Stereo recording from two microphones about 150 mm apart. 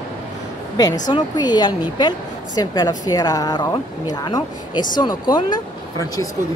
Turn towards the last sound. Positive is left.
turn(degrees=25)  # may be behind; listen again after turning